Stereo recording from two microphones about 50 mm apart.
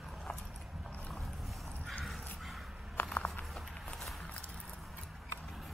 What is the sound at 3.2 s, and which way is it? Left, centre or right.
Run, left.